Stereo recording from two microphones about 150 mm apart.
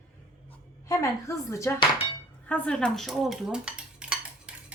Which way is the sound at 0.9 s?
20° left (ahead or behind).